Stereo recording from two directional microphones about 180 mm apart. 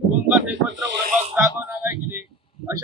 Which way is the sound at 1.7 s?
10° right (ahead or behind).